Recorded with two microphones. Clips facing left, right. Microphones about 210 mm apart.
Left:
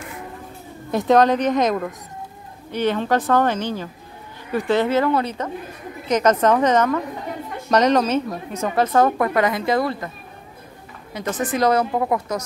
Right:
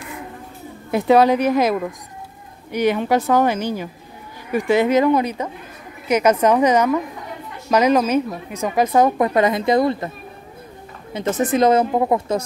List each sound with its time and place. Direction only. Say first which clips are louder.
0.9 s a woman's voice: right 2 dB; 10° right (ahead or behind)
11.1 s a woman's voice: right 4 dB; 25° right (ahead or behind)